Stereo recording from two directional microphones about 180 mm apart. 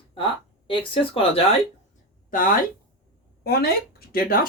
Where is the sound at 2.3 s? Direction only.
50° left (ahead or behind).